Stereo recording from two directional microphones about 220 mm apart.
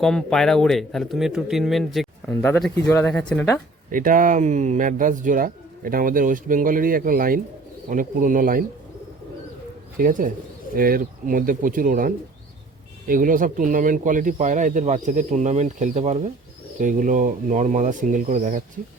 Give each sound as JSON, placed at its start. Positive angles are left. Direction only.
{"t": 0.0, "sound": "speech", "side_deg": 5}
{"t": 3.9, "sound": "speech", "side_deg": -40}
{"t": 10.0, "sound": "speech", "side_deg": -40}